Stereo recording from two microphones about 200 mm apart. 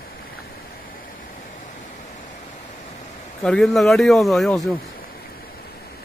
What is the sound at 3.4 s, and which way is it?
Speech, 5° left (ahead or behind).